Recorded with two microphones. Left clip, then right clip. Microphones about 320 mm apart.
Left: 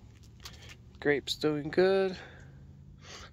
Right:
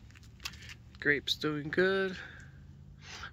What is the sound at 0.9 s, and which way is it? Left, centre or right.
Speech, centre.